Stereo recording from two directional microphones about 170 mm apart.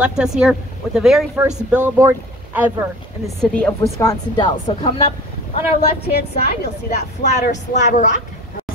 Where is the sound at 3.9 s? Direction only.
25° left (ahead or behind).